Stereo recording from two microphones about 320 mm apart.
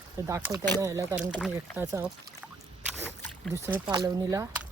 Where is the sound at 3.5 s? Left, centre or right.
Centre.